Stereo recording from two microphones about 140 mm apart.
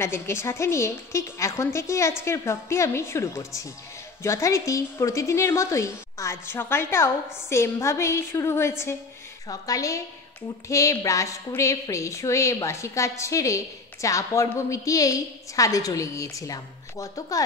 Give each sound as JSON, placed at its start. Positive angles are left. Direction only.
{"t": 0.0, "sound": "a woman's voice", "side_deg": 20}